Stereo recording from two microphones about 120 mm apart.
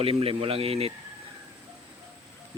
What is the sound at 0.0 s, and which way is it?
Speech, 55° right (ahead or behind).